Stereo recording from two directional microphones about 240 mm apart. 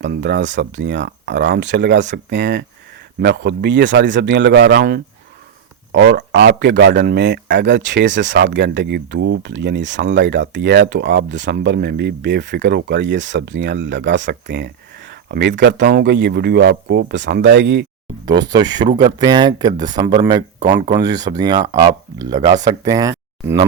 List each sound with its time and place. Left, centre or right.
0.0 s speech: right
18.3 s speech: centre